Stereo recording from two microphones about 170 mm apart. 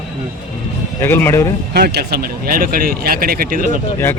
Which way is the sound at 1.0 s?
15° left (ahead or behind).